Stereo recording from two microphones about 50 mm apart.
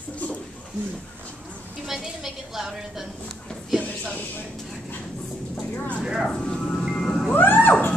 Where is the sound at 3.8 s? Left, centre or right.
Left.